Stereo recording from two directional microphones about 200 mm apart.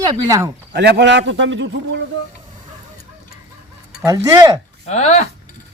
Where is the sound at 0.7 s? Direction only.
60° right (ahead or behind).